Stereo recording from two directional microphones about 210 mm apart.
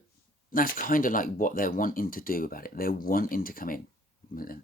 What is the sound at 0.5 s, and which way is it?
Speech, 40° left (ahead or behind).